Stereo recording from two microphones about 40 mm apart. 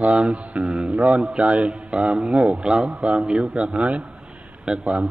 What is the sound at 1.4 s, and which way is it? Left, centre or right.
A man's voice, right.